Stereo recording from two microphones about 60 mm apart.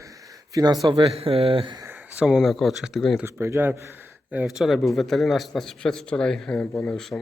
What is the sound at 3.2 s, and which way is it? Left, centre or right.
Speech, right.